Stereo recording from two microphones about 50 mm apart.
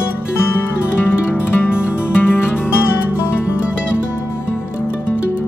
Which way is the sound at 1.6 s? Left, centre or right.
Left.